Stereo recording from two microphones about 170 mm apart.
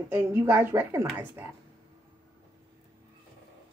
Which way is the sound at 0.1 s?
15° right (ahead or behind).